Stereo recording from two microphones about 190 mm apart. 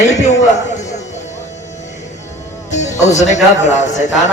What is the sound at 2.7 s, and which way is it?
A man's voice, 40° left (ahead or behind).